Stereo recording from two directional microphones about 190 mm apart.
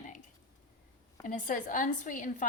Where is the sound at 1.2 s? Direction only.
45° left (ahead or behind).